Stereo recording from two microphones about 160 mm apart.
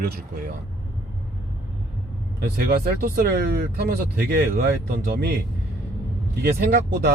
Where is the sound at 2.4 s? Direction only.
70° right (ahead or behind).